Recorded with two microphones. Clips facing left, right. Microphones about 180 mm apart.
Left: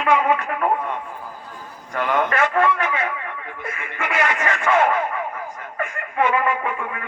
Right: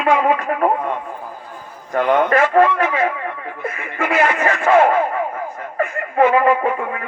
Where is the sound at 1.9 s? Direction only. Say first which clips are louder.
Right 6 dB; 45° right (ahead or behind).